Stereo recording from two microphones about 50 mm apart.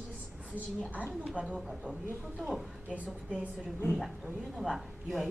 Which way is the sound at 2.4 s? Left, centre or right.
Centre.